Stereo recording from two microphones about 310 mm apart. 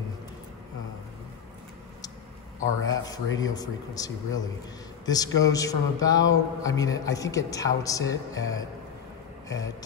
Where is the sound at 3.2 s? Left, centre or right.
Left.